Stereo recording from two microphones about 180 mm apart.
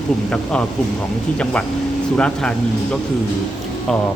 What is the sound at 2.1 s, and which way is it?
Speech, 5° left (ahead or behind).